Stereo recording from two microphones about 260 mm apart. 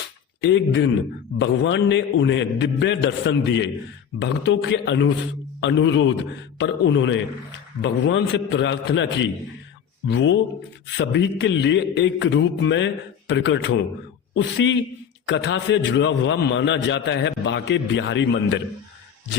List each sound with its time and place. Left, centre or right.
0.4 s a man's voice: left